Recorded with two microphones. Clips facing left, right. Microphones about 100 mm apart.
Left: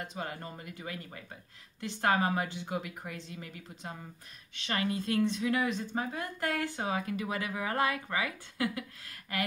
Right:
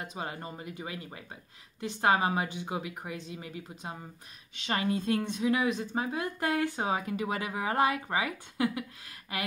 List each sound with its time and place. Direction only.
0.1 s speech: 20° right (ahead or behind)